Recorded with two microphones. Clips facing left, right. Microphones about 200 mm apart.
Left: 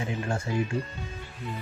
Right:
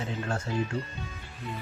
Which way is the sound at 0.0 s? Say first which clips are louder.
Left 2 dB; 10° left (ahead or behind).